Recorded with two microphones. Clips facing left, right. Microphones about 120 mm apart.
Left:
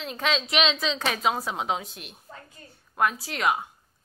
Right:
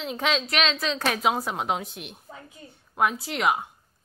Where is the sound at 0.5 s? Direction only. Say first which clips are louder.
Left 1 dB; centre (ahead or behind).